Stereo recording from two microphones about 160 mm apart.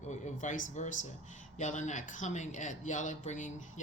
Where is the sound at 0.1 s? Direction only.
50° left (ahead or behind).